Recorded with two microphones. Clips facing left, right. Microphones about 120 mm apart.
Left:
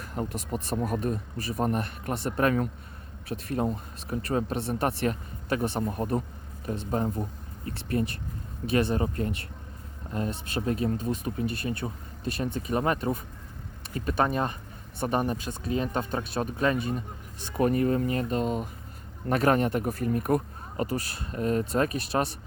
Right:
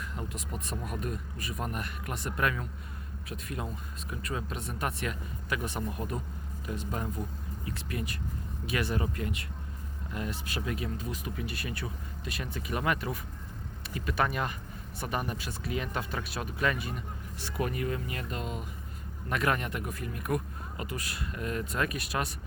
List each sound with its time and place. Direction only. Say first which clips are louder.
0.0 s speech: left 6 dB; 40° left (ahead or behind)